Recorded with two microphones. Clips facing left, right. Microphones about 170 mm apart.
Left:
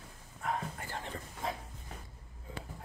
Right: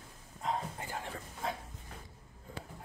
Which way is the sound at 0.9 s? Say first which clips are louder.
Even; centre (ahead or behind).